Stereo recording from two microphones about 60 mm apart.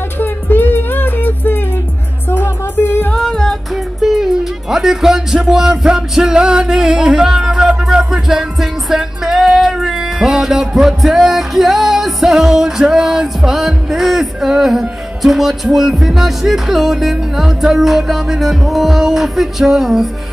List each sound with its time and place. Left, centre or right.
0.2 s music: left
3.1 s female singing: centre
3.7 s music: centre